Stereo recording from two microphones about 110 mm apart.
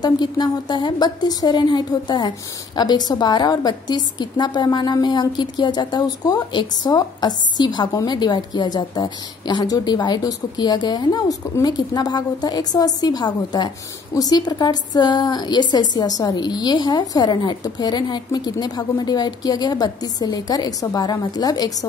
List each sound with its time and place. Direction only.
0.0 s a woman's voice: 40° left (ahead or behind)